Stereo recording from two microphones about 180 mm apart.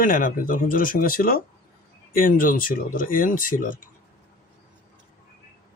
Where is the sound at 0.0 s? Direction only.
50° left (ahead or behind).